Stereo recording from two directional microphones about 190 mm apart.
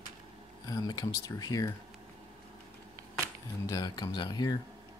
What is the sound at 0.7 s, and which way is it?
Speech, 20° left (ahead or behind).